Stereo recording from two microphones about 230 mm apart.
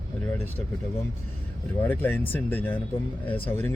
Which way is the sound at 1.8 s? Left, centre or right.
Centre.